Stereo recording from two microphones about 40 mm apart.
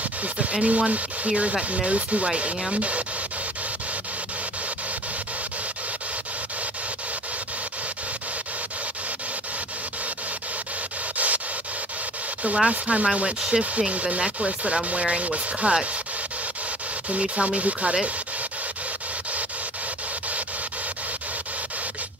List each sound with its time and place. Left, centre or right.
0.2 s speech: right
11.1 s rub: right
12.6 s speech: right
17.1 s speech: right